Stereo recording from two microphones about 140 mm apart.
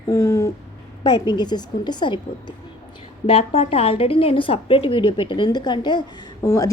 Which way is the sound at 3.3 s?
45° left (ahead or behind).